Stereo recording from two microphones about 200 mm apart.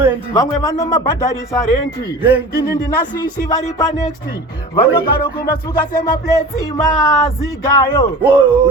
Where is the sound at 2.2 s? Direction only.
10° right (ahead or behind).